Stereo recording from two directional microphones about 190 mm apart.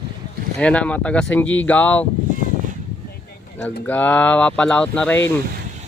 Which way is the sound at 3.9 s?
10° left (ahead or behind).